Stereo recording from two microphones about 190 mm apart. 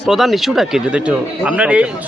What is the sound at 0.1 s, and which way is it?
Speech, centre (ahead or behind).